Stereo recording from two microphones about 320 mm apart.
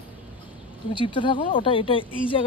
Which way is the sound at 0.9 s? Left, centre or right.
Centre.